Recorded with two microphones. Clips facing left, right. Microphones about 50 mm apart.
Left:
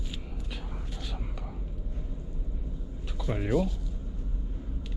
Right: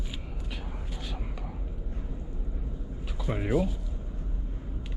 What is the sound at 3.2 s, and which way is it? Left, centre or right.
Speech, centre.